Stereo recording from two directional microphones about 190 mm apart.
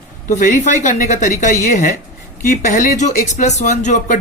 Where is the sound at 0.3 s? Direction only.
40° left (ahead or behind).